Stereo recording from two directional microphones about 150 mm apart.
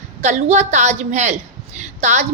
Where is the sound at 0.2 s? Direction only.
50° right (ahead or behind).